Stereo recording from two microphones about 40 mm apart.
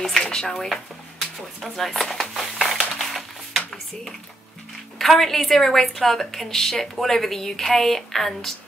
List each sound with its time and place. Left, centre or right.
0.2 s speech: centre
1.2 s a sound: centre
4.9 s a woman's voice: centre